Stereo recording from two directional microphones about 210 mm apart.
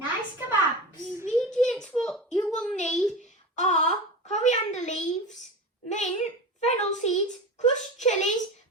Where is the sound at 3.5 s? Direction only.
35° left (ahead or behind).